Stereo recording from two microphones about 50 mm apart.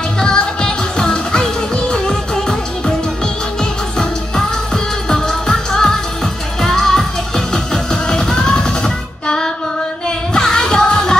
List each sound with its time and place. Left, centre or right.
0.2 s music: centre
5.1 s music: centre